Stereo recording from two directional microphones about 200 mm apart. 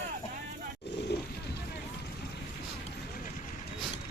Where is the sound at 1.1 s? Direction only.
55° left (ahead or behind).